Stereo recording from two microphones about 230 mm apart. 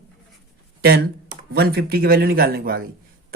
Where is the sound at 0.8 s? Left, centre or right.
Right.